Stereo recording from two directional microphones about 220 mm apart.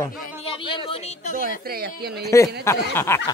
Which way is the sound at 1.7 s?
45° right (ahead or behind).